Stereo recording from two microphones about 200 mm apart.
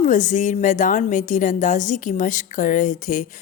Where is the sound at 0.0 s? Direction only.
40° left (ahead or behind).